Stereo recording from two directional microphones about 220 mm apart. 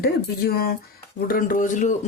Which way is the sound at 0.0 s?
45° left (ahead or behind).